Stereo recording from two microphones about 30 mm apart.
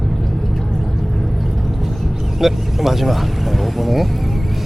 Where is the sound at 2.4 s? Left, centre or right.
Centre.